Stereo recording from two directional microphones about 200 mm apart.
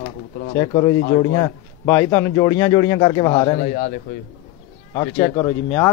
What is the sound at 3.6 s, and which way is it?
Speech, 40° left (ahead or behind).